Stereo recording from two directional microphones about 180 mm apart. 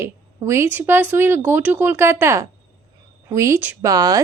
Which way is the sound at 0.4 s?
15° right (ahead or behind).